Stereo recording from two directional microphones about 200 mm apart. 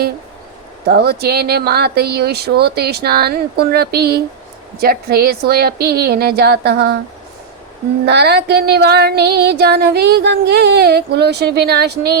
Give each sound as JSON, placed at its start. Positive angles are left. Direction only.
{"t": 0.9, "sound": "speech", "side_deg": -50}
{"t": 8.0, "sound": "music", "side_deg": -55}